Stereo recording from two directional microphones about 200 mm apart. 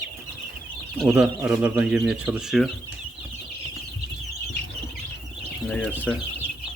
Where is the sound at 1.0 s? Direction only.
5° right (ahead or behind).